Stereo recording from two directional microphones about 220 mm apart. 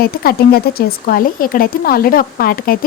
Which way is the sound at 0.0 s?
45° left (ahead or behind).